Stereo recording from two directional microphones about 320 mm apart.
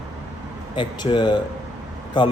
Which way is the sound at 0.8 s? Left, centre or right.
Centre.